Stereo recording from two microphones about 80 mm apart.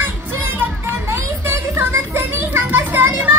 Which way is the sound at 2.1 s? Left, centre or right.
Right.